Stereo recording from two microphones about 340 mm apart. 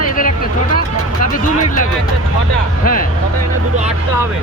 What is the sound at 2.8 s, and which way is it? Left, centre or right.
Music, left.